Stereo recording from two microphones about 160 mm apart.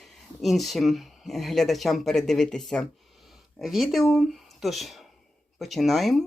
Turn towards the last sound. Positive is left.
turn(degrees=0)  # may be behind; listen again after turning